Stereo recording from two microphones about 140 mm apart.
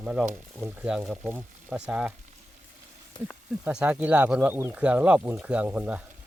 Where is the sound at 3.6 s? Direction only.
10° right (ahead or behind).